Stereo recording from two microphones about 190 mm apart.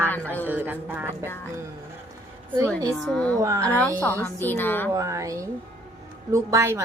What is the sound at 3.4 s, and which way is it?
Speech, 15° right (ahead or behind).